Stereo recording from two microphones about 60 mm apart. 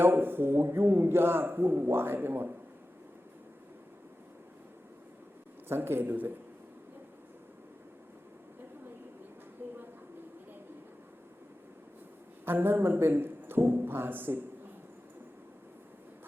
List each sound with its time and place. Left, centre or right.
0.0 s a man's voice: right
5.6 s a man's voice: right
9.6 s a sound: right
12.5 s a man's voice: right